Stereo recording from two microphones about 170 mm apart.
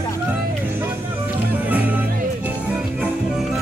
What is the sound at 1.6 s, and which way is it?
Music, 10° right (ahead or behind).